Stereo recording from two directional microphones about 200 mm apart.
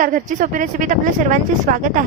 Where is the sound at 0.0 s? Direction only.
40° right (ahead or behind).